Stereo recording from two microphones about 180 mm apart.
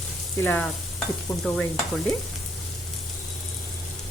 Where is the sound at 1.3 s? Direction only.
15° left (ahead or behind).